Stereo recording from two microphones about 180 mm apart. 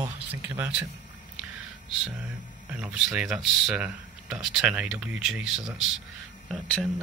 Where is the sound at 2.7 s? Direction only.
5° right (ahead or behind).